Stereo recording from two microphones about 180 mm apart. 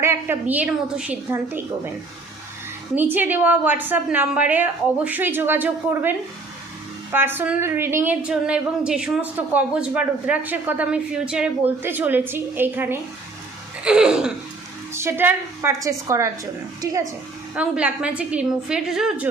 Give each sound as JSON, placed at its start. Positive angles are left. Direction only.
{"t": 0.0, "sound": "a woman's voice", "side_deg": -15}
{"t": 2.9, "sound": "a woman's voice", "side_deg": -10}
{"t": 13.8, "sound": "a sound", "side_deg": -5}
{"t": 14.9, "sound": "a woman's voice", "side_deg": -15}
{"t": 17.5, "sound": "a woman's voice", "side_deg": -5}